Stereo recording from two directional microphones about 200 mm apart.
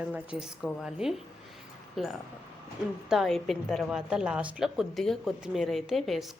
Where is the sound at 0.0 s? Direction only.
5° right (ahead or behind).